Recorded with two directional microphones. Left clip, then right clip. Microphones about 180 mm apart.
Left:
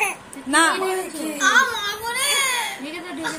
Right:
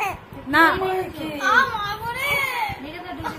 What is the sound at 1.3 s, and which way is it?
Speech, centre (ahead or behind).